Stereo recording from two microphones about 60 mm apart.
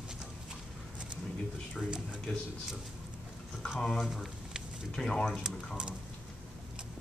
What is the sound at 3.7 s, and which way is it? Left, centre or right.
Speech, centre.